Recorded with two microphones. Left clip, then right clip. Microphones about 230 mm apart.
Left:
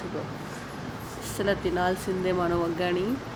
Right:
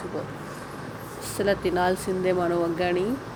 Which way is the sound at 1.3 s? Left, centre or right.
Centre.